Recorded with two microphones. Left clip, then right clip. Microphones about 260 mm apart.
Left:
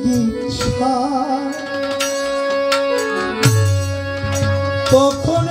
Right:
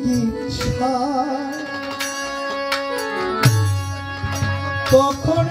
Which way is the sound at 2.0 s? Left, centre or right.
Left.